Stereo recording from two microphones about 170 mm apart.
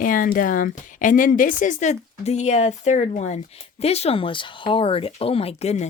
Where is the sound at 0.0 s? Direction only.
55° left (ahead or behind).